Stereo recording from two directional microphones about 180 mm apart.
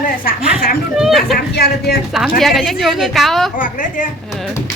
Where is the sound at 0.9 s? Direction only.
Centre (ahead or behind).